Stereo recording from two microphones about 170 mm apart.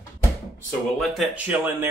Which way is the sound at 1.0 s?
Centre (ahead or behind).